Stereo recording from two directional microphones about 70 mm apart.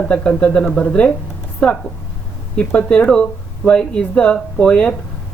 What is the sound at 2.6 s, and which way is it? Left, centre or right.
Speech, centre.